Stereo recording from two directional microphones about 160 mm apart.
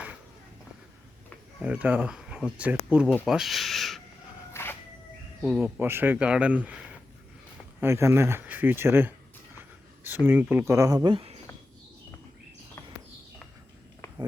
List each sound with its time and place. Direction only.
1.5 s speech: 5° right (ahead or behind)
4.5 s music: 15° left (ahead or behind)
5.4 s speech: 5° right (ahead or behind)
10.2 s speech: 10° right (ahead or behind); by 11.3 s 35° right (ahead or behind)